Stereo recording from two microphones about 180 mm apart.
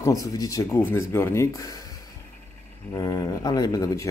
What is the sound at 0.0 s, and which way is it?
Speech, 20° left (ahead or behind).